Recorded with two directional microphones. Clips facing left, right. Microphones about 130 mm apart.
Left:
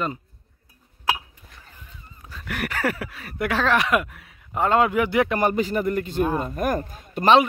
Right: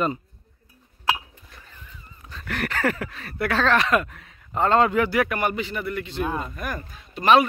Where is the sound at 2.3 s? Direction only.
10° left (ahead or behind).